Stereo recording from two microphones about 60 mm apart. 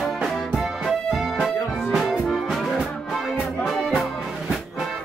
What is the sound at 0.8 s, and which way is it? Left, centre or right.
Music, centre.